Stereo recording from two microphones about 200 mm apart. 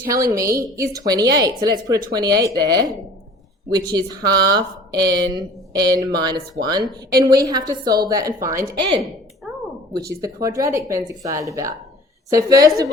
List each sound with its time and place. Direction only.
0.1 s a woman's voice: 15° right (ahead or behind)
3.9 s speech: 20° right (ahead or behind)
10.2 s a woman's voice: 15° right (ahead or behind)